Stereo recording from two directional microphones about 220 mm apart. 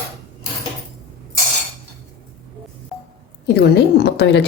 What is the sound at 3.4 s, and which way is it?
A woman's voice, 50° left (ahead or behind).